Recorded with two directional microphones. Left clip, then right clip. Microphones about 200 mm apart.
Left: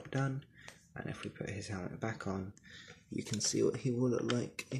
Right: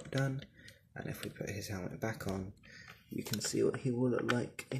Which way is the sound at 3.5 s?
15° left (ahead or behind).